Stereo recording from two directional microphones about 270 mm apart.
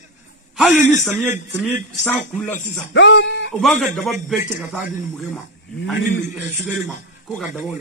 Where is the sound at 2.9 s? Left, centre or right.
Left.